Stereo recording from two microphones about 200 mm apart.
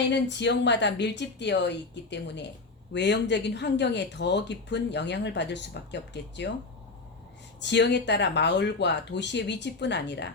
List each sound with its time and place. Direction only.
0.1 s speech: 60° left (ahead or behind)
7.6 s speech: 60° left (ahead or behind)